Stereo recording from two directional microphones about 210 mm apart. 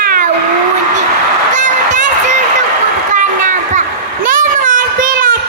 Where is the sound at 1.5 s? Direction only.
35° right (ahead or behind).